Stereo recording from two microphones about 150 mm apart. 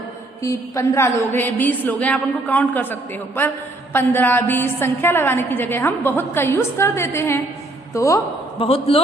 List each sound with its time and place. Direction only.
0.4 s a woman's voice: 20° left (ahead or behind)
8.5 s a man's voice: 40° left (ahead or behind)